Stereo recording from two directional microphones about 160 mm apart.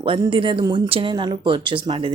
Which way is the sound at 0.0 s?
35° right (ahead or behind).